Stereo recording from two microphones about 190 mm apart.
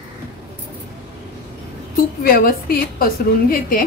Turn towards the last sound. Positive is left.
turn(degrees=50)  # may be behind; listen again after turning